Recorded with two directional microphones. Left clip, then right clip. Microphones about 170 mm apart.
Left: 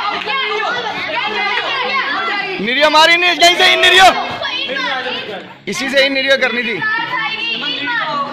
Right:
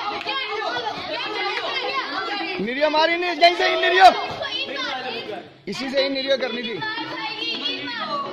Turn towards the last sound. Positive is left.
turn(degrees=-5)  # may be behind; listen again after turning